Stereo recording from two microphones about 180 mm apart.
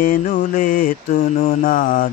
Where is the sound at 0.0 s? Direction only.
50° left (ahead or behind).